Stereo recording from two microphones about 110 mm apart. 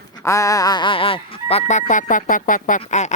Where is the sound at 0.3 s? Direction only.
30° left (ahead or behind); by 1.8 s 75° left (ahead or behind).